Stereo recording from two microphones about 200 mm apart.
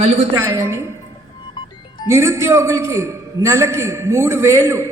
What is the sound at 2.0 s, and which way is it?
A man's voice, 15° right (ahead or behind).